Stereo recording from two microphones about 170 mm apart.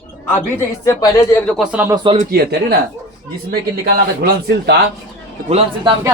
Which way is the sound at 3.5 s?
65° right (ahead or behind).